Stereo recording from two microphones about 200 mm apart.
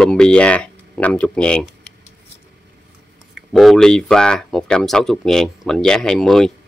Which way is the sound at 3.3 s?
Centre (ahead or behind).